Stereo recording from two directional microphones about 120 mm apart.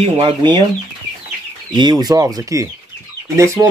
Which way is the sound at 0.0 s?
40° right (ahead or behind).